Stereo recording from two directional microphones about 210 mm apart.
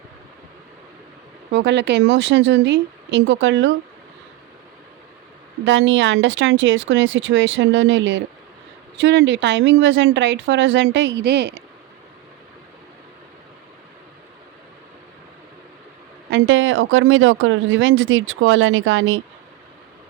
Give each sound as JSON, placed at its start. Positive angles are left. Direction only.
{"t": 1.5, "sound": "speech", "side_deg": -55}
{"t": 5.6, "sound": "speech", "side_deg": -65}
{"t": 16.3, "sound": "speech", "side_deg": -65}